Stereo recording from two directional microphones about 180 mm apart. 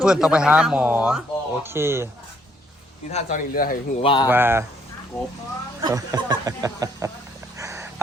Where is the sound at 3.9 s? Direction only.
30° left (ahead or behind).